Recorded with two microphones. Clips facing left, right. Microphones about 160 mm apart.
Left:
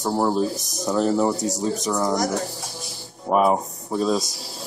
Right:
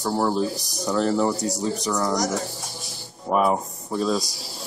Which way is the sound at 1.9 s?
20° left (ahead or behind).